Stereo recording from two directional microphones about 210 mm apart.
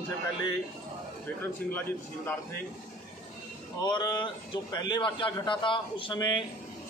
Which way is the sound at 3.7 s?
20° left (ahead or behind).